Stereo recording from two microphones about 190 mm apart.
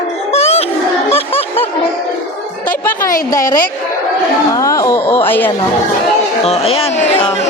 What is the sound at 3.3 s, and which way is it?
A woman's voice, 20° left (ahead or behind).